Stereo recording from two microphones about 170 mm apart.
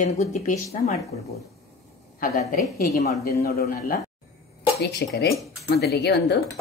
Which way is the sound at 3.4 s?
65° left (ahead or behind).